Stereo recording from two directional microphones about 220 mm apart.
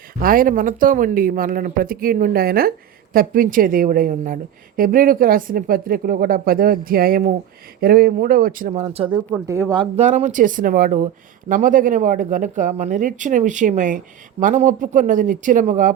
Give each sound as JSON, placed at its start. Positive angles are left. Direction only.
{"t": 0.2, "sound": "speech", "side_deg": -40}
{"t": 9.0, "sound": "speech", "side_deg": -5}